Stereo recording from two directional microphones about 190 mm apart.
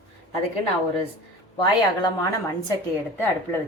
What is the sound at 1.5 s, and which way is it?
Speech, 25° left (ahead or behind).